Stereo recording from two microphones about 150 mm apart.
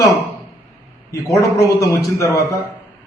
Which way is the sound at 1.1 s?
20° left (ahead or behind).